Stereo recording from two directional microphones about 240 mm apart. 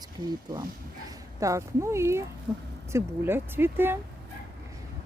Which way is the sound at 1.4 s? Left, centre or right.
Centre.